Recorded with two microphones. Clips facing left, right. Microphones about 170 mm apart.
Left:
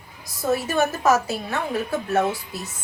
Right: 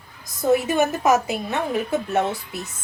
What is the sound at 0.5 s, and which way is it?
A woman's voice, 20° right (ahead or behind).